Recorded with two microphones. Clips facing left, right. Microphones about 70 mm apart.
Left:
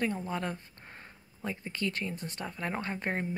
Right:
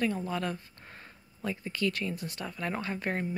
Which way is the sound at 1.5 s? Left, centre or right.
Left.